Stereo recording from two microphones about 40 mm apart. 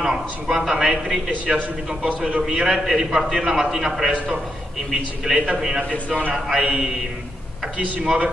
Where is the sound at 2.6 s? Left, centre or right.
Centre.